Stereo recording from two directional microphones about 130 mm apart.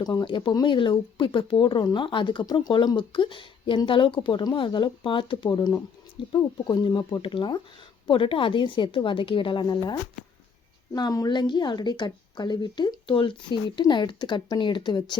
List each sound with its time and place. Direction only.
0.0 s speech: 30° left (ahead or behind)
5.5 s speech: 30° left (ahead or behind)